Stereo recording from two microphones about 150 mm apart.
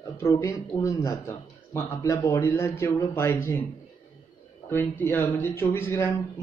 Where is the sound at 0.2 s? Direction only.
20° left (ahead or behind).